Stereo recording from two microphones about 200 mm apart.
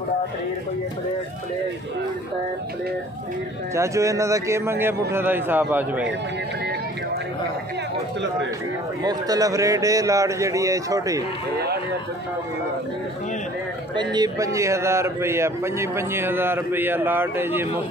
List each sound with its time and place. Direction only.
3.7 s a man's voice: 15° right (ahead or behind)
9.0 s a man's voice: 20° right (ahead or behind)
13.9 s a man's voice: 20° right (ahead or behind)